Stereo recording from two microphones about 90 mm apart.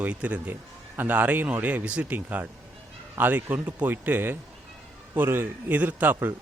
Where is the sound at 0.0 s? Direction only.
15° right (ahead or behind).